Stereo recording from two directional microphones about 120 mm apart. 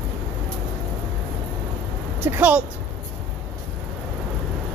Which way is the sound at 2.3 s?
15° right (ahead or behind).